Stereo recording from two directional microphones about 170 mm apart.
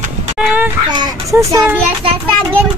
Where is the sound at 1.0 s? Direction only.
20° right (ahead or behind).